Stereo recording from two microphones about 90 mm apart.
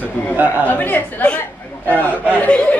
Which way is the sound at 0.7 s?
20° left (ahead or behind).